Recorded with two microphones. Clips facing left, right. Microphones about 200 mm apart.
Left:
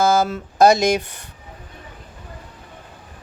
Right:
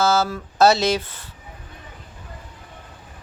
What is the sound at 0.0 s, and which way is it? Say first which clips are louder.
Mantra: left 2 dB; 15° left (ahead or behind).